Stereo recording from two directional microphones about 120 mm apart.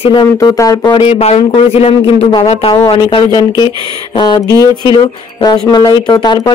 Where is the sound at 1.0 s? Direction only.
65° left (ahead or behind).